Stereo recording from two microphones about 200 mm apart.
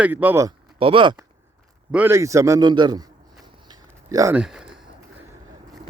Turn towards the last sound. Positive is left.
turn(degrees=-5)  # may be behind; listen again after turning